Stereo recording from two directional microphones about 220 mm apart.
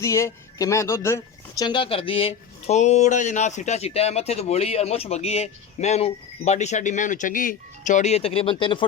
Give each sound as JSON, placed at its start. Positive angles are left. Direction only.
{"t": 0.0, "sound": "speech", "side_deg": 15}